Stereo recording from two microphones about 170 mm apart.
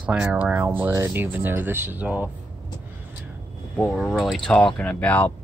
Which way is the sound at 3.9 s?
Centre (ahead or behind).